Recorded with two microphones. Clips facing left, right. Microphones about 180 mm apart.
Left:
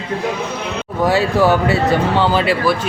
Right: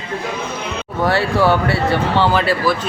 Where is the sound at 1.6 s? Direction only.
20° left (ahead or behind).